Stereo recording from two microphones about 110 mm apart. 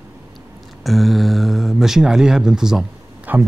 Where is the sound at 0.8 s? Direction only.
Centre (ahead or behind).